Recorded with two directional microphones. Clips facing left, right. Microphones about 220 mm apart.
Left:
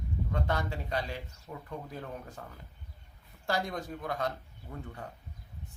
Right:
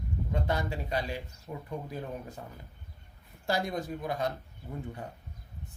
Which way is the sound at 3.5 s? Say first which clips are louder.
Right 2 dB; 10° right (ahead or behind).